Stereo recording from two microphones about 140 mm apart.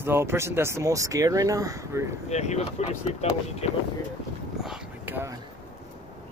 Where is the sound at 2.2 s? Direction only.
55° left (ahead or behind).